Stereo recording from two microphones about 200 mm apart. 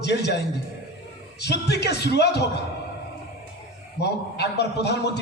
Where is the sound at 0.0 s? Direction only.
55° left (ahead or behind).